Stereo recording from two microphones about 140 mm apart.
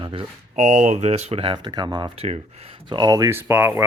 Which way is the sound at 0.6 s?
55° right (ahead or behind).